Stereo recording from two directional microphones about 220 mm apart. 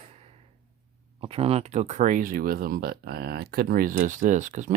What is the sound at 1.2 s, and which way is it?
Speech, 25° right (ahead or behind).